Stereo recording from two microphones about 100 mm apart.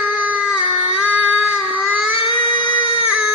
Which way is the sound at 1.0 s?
15° right (ahead or behind).